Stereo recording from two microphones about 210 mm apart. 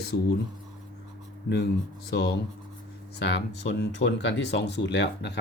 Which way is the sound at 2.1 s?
50° left (ahead or behind).